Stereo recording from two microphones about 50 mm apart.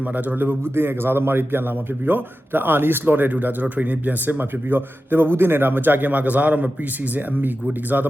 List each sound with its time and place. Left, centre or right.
0.0 s a man's voice: right